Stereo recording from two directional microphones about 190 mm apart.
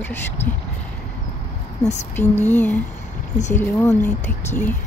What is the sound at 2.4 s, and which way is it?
Speech, 10° left (ahead or behind).